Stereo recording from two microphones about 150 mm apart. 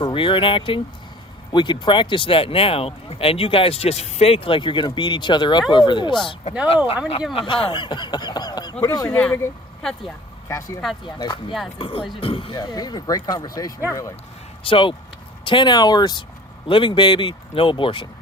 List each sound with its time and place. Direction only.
0.0 s speech: 35° left (ahead or behind)
7.3 s speech: 35° left (ahead or behind)
9.1 s speech: 10° left (ahead or behind)
11.0 s speech: 30° left (ahead or behind)